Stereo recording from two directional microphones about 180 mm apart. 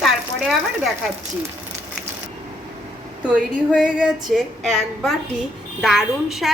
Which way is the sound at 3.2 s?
5° right (ahead or behind).